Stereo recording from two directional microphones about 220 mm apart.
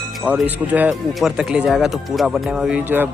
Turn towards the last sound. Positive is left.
turn(degrees=-5)  # may be behind; listen again after turning